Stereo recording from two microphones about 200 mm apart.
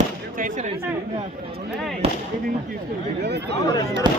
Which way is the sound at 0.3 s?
40° right (ahead or behind).